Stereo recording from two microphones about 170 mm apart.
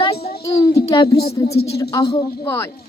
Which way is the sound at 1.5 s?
70° left (ahead or behind).